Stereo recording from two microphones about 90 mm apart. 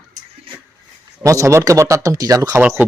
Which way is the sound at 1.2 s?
35° right (ahead or behind).